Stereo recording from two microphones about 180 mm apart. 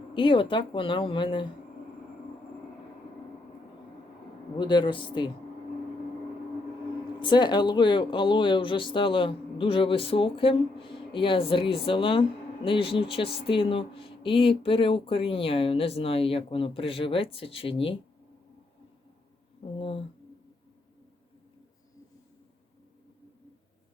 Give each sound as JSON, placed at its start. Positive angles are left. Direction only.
{"t": 0.1, "sound": "speech", "side_deg": 30}
{"t": 4.5, "sound": "speech", "side_deg": 25}
{"t": 7.2, "sound": "speech", "side_deg": 25}
{"t": 19.6, "sound": "speech", "side_deg": 30}